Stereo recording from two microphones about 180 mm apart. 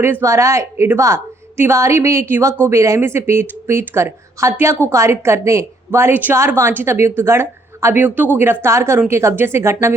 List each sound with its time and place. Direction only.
0.0 s speech: 15° right (ahead or behind)